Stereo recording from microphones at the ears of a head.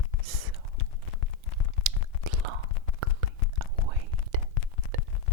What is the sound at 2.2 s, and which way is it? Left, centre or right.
Whispering, right.